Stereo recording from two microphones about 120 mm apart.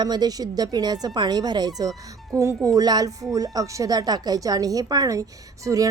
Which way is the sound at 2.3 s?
25° right (ahead or behind).